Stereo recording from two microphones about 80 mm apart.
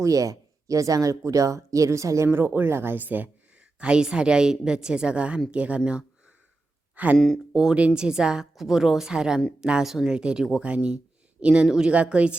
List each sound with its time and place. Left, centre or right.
0.0 s speech: right
3.8 s a woman's voice: centre
7.2 s speech: centre
7.5 s a woman's voice: centre